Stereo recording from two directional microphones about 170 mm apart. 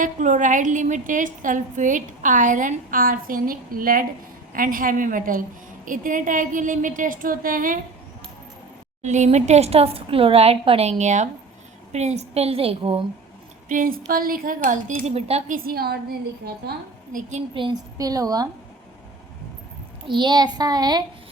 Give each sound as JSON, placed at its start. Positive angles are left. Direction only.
{"t": 0.0, "sound": "a woman's voice", "side_deg": -45}
{"t": 9.0, "sound": "speech", "side_deg": -45}
{"t": 13.7, "sound": "a woman's voice", "side_deg": -55}
{"t": 15.5, "sound": "a woman's voice", "side_deg": -60}
{"t": 17.5, "sound": "a child's voice", "side_deg": -25}
{"t": 20.1, "sound": "a child's voice", "side_deg": -25}